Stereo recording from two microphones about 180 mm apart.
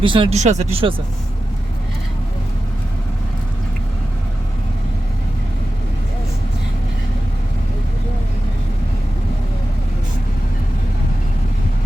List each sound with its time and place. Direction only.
0.0 s speech: 30° right (ahead or behind)